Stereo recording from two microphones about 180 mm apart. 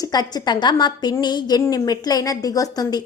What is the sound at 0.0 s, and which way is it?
A woman's voice, 20° left (ahead or behind).